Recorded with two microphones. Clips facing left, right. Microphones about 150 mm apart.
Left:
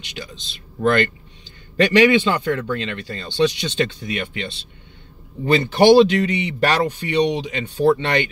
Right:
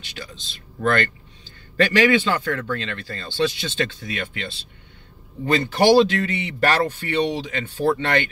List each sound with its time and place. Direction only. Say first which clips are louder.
0.0 s a man's voice: left 3 dB; 15° left (ahead or behind)